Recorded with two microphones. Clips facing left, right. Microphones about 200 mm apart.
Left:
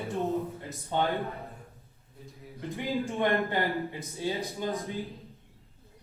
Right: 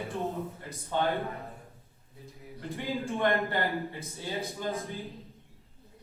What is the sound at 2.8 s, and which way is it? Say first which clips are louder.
Speech: left 1 dB; 15° left (ahead or behind).